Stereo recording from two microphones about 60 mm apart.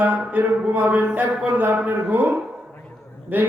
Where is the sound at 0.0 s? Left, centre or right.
Right.